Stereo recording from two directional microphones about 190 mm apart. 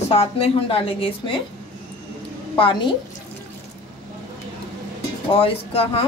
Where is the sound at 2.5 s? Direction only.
25° left (ahead or behind).